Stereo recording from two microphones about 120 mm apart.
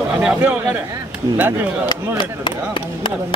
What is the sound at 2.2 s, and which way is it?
Speech, 40° left (ahead or behind).